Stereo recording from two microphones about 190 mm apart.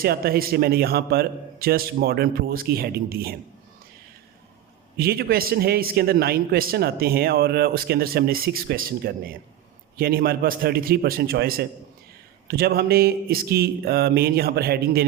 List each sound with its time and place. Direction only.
0.0 s a man's voice: 55° right (ahead or behind)
4.9 s a man's voice: 55° right (ahead or behind)
12.5 s a sound: 55° right (ahead or behind)